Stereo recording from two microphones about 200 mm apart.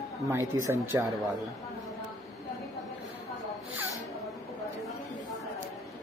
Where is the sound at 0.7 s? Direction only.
10° right (ahead or behind).